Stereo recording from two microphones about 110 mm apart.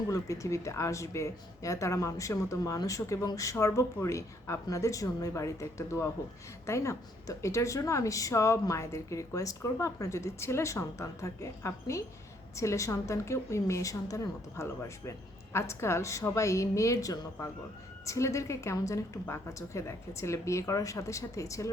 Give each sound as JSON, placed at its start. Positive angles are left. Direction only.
{"t": 0.1, "sound": "speech", "side_deg": 30}